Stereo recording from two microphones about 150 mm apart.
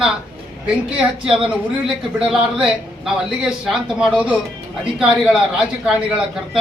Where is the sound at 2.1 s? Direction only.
5° right (ahead or behind).